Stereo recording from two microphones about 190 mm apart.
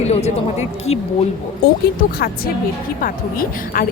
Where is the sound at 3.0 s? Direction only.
50° left (ahead or behind).